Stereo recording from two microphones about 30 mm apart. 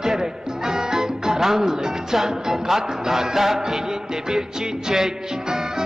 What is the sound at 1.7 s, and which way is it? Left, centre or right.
Music, centre.